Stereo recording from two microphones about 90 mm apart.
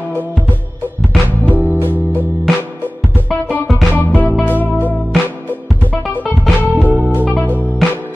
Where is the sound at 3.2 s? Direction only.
15° left (ahead or behind).